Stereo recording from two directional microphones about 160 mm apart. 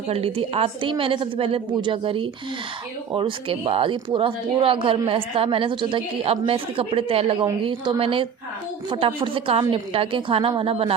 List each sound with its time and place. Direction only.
0.1 s speech: 35° right (ahead or behind)